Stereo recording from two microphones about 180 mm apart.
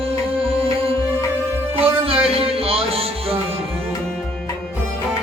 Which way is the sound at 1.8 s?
30° right (ahead or behind).